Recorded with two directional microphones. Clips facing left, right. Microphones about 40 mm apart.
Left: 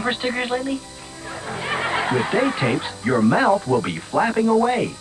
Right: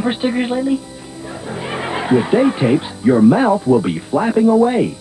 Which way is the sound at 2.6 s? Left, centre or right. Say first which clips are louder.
Right 7 dB; left.